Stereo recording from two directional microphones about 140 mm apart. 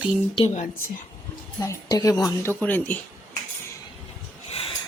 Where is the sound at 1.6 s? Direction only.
25° left (ahead or behind).